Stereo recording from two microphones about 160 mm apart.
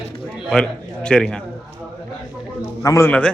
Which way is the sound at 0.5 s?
5° left (ahead or behind).